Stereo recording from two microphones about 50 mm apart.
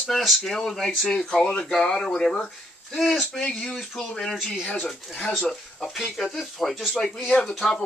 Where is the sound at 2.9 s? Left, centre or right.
Centre.